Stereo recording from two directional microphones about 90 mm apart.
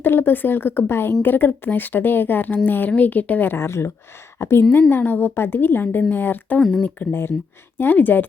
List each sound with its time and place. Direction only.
0.0 s a woman's voice: 25° left (ahead or behind)
6.6 s speech: centre (ahead or behind)
6.8 s a woman's voice: 20° left (ahead or behind)